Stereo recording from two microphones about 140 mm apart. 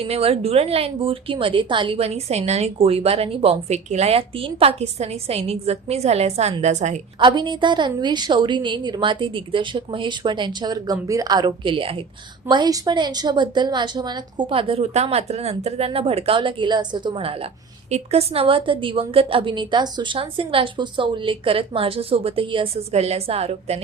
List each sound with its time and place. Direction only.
0.0 s a woman's voice: 45° right (ahead or behind)
7.2 s a woman's voice: 35° right (ahead or behind)